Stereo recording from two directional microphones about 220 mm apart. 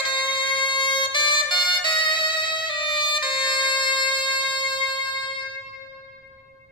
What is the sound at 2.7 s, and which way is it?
Music, 20° left (ahead or behind).